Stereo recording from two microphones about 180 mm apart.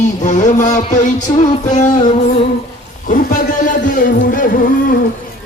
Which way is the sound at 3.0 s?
50° left (ahead or behind).